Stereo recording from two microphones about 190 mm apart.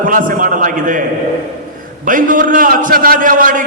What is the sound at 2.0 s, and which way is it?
A man's voice, 45° right (ahead or behind).